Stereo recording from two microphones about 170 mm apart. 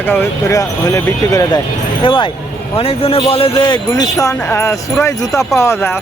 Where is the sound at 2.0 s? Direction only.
30° left (ahead or behind).